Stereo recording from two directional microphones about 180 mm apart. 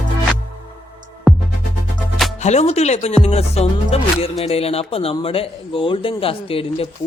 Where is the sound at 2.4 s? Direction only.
40° left (ahead or behind).